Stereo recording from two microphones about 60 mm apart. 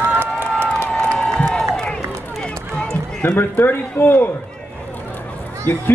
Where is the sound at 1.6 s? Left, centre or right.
Centre.